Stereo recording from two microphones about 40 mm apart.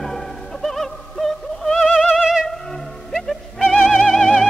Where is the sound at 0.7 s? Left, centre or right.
Centre.